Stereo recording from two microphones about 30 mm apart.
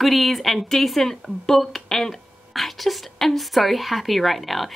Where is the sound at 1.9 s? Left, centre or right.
Centre.